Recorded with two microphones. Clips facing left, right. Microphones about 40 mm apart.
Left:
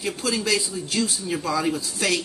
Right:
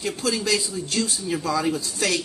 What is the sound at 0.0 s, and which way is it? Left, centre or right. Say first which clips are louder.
A man's voice: even; centre.